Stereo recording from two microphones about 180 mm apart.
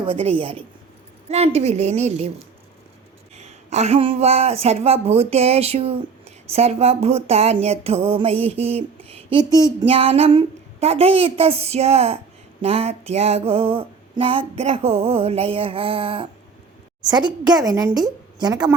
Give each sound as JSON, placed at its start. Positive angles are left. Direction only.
{"t": 0.0, "sound": "speech", "side_deg": -30}
{"t": 3.3, "sound": "a woman's voice", "side_deg": -40}